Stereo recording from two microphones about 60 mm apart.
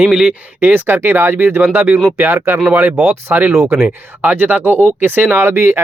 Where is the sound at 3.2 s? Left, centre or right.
Right.